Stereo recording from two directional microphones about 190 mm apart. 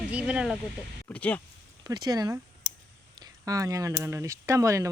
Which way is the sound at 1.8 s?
20° right (ahead or behind).